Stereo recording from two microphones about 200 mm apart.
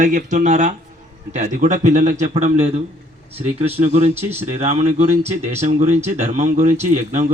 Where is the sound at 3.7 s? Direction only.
35° right (ahead or behind).